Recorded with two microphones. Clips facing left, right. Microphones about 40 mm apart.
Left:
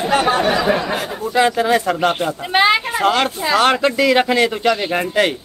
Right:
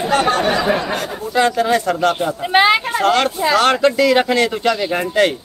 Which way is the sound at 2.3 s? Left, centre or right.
Centre.